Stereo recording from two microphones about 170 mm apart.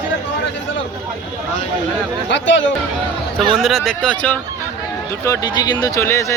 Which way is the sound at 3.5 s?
Centre (ahead or behind).